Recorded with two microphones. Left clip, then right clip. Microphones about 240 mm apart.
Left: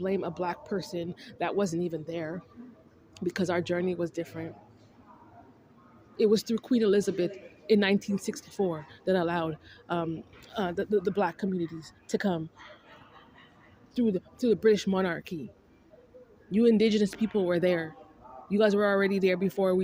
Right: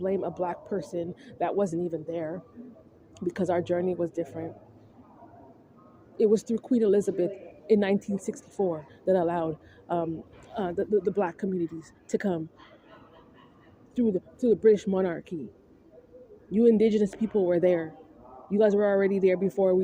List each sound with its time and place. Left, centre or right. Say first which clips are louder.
0.0 s speech: right 2 dB; left
6.1 s speech: right 1 dB; left
13.9 s speech: right 2 dB; left
16.5 s speech: right 2 dB; left